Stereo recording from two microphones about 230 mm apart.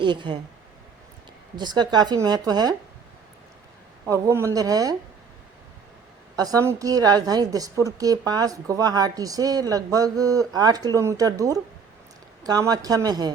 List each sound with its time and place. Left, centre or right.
0.0 s speech: right
1.5 s a woman's voice: centre
4.0 s a woman's voice: centre
6.3 s a woman's voice: centre